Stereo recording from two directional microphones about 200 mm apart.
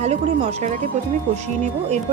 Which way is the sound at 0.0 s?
30° right (ahead or behind).